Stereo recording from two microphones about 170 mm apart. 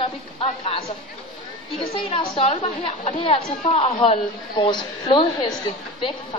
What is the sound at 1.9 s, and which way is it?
A woman's voice, 35° left (ahead or behind).